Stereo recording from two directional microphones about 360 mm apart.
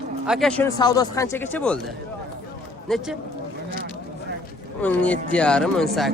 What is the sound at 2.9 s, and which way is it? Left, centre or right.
Speech, centre.